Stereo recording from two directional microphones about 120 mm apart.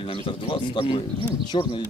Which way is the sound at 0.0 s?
50° left (ahead or behind).